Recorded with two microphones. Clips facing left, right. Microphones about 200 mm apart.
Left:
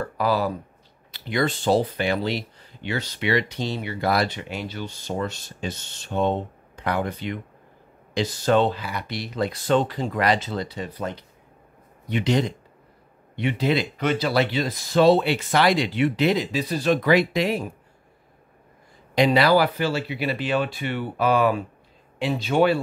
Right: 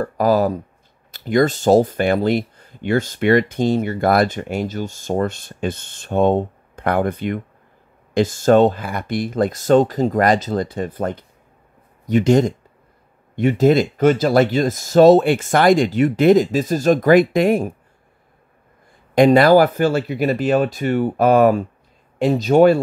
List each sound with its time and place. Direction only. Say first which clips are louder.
0.0 s speech: right 7 dB; 45° right (ahead or behind)
19.1 s speech: right 7 dB; 50° right (ahead or behind)